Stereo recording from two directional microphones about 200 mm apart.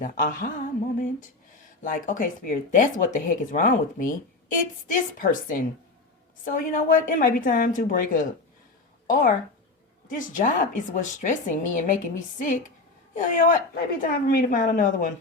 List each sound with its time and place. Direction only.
0.0 s a woman's voice: 40° left (ahead or behind)
13.1 s speech: 40° left (ahead or behind)